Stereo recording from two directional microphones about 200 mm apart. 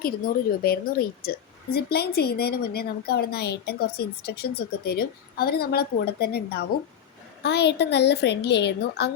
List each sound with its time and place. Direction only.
0.6 s a woman's voice: 50° left (ahead or behind)